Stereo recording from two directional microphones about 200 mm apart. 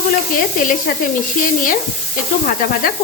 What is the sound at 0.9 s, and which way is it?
Sizzle, 50° left (ahead or behind).